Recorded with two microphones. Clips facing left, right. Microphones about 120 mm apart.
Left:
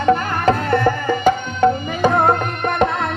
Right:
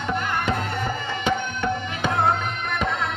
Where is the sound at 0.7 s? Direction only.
90° left.